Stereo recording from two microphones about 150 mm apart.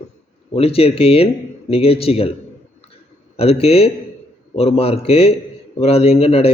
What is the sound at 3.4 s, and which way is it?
A man's voice, 40° left (ahead or behind).